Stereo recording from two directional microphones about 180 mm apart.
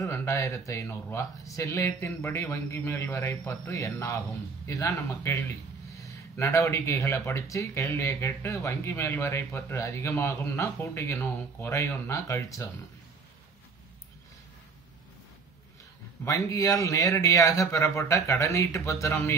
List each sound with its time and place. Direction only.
0.0 s speech: 15° left (ahead or behind)
16.3 s speech: 20° left (ahead or behind)